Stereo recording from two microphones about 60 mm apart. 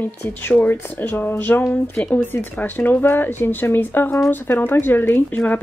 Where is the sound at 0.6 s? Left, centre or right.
Left.